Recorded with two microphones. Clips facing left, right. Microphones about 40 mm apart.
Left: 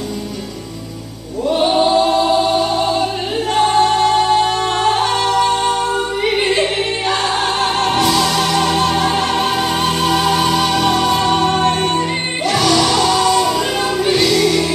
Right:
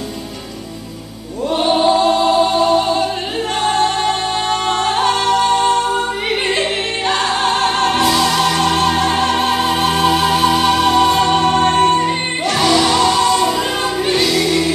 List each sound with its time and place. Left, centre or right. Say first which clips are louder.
1.5 s choir: even; centre
3.5 s music: left 3 dB; centre
11.6 s music: right 3 dB; right
11.9 s music: right 2 dB; centre